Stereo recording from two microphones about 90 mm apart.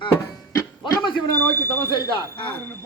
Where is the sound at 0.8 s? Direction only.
60° left (ahead or behind).